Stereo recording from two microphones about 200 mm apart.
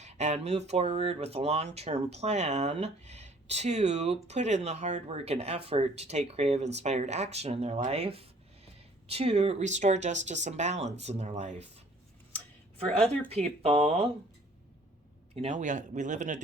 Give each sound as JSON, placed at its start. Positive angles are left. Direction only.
{"t": 0.0, "sound": "speech", "side_deg": -35}
{"t": 13.3, "sound": "speech", "side_deg": -30}
{"t": 15.4, "sound": "speech", "side_deg": -35}